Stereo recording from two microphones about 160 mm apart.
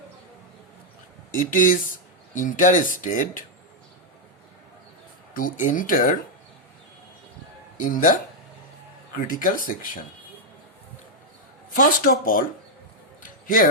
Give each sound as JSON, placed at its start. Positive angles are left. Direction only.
{"t": 1.3, "sound": "speech", "side_deg": 55}
{"t": 5.3, "sound": "speech", "side_deg": 55}
{"t": 7.8, "sound": "speech", "side_deg": 55}
{"t": 11.7, "sound": "speech", "side_deg": 55}